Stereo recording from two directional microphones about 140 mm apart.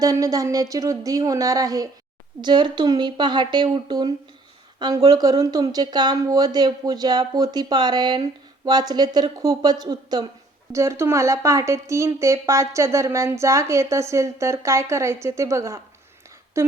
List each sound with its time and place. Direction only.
0.0 s speech: 25° right (ahead or behind)